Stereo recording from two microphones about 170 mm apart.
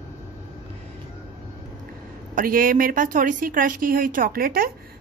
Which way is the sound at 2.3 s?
55° right (ahead or behind).